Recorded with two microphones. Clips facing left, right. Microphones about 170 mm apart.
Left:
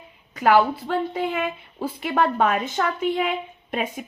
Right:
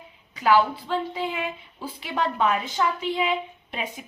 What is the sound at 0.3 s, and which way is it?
A woman's voice, 50° left (ahead or behind).